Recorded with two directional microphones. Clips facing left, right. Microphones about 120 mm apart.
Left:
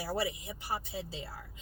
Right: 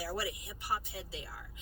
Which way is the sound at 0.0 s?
25° left (ahead or behind).